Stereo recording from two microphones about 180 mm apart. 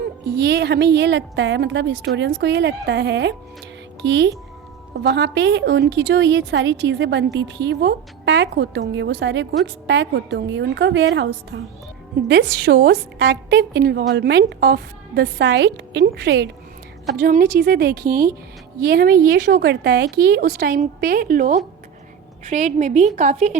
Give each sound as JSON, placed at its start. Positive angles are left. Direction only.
{"t": 0.3, "sound": "a woman's voice", "side_deg": -70}
{"t": 12.3, "sound": "a woman's voice", "side_deg": -65}
{"t": 17.2, "sound": "a woman's voice", "side_deg": -55}